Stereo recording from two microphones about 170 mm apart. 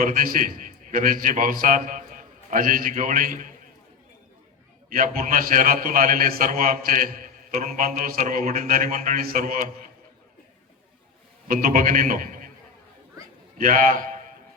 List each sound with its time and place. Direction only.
0.0 s a man's voice: 55° right (ahead or behind)
4.9 s a man's voice: 55° right (ahead or behind)
11.4 s a man's voice: 55° right (ahead or behind)
13.6 s a man's voice: 55° right (ahead or behind)